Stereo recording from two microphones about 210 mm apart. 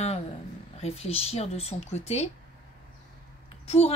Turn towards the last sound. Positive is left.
turn(degrees=30)  # may be behind; listen again after turning